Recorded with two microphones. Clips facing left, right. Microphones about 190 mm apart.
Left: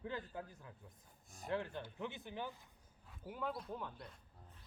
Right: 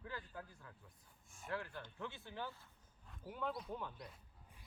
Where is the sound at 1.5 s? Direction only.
20° left (ahead or behind).